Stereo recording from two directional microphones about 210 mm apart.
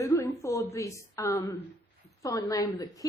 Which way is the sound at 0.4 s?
15° left (ahead or behind).